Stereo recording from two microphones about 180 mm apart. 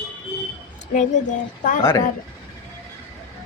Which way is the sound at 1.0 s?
45° left (ahead or behind).